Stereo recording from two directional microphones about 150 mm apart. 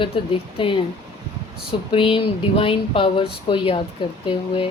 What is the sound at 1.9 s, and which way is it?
Speech, 35° left (ahead or behind).